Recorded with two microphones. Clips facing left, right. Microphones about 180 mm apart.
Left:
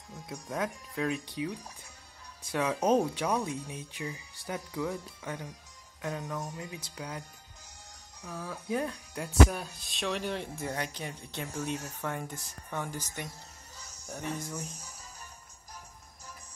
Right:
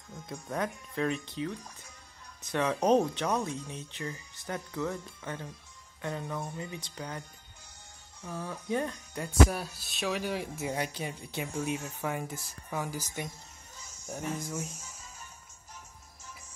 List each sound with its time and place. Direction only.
0.3 s speech: centre (ahead or behind)
8.3 s speech: 5° left (ahead or behind); by 13.3 s 15° right (ahead or behind)
14.3 s speech: 10° right (ahead or behind)
14.8 s music: 35° left (ahead or behind)